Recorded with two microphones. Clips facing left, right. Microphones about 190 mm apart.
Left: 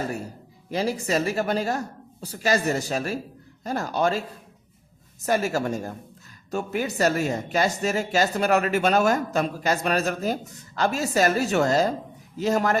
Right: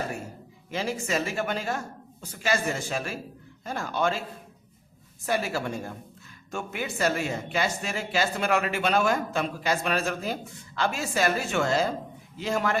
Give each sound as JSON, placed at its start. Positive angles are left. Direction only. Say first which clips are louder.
{"t": 0.7, "sound": "speech", "louder": "left 4 dB", "side_deg": 35}
{"t": 5.2, "sound": "a woman's voice", "louder": "left 4 dB", "side_deg": 45}